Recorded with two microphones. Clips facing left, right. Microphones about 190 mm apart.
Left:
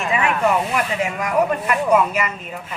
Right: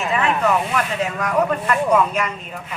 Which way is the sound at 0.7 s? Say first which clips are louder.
Even; 10° left (ahead or behind).